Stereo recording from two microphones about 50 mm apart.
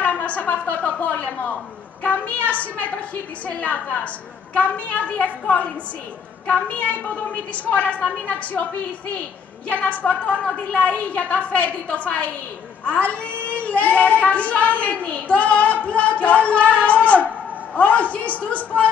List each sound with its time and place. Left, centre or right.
0.0 s a woman's voice: left
9.7 s a woman's voice: left